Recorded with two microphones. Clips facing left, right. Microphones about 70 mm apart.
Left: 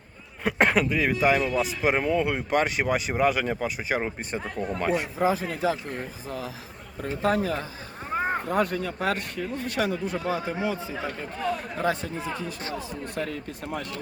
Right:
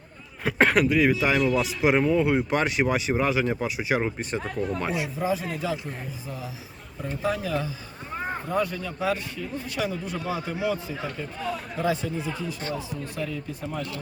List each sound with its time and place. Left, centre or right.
0.4 s speech: centre
4.9 s speech: left
7.0 s speech: left
11.8 s speech: left